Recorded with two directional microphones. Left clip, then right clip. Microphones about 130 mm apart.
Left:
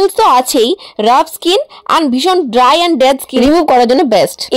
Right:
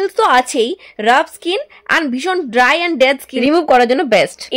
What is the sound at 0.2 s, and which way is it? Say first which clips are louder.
Speech: left 2 dB; 40° left (ahead or behind).